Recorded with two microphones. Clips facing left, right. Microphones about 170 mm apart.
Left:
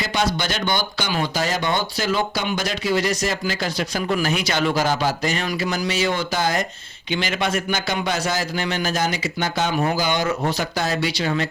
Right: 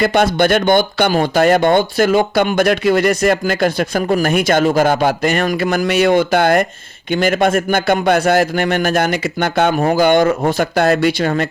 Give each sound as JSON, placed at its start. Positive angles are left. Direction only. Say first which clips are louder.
{"t": 0.0, "sound": "speech", "louder": "right 10 dB", "side_deg": -55}
{"t": 7.1, "sound": "speech", "louder": "right 9 dB", "side_deg": -50}